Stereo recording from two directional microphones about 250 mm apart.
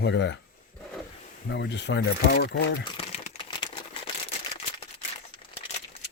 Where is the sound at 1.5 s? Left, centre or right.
Left.